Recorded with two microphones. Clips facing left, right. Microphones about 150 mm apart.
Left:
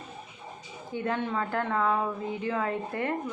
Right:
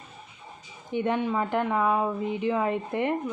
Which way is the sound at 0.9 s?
20° right (ahead or behind).